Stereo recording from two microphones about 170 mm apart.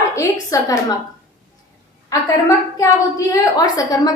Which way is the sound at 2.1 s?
20° left (ahead or behind).